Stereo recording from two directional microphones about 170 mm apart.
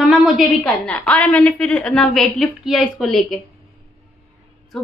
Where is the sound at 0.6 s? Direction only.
10° left (ahead or behind).